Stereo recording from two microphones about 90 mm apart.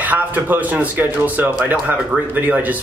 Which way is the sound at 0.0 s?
20° right (ahead or behind).